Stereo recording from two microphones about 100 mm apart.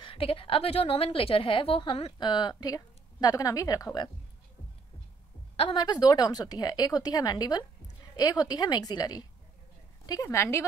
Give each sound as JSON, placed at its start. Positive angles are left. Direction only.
{"t": 0.0, "sound": "a woman's voice", "side_deg": 65}
{"t": 2.1, "sound": "speech", "side_deg": 45}
{"t": 5.8, "sound": "a woman's voice", "side_deg": 45}